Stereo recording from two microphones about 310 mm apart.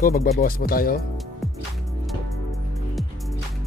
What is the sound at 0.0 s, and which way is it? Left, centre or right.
Speech, left.